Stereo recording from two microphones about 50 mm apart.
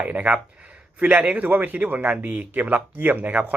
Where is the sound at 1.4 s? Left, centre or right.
Right.